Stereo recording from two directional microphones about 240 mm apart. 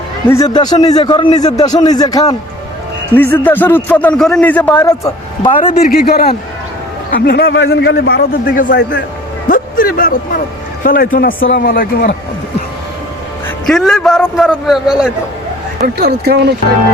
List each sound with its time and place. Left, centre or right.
0.3 s a man's voice: centre
5.8 s a man's voice: left
13.7 s a man's voice: centre
16.0 s speech: right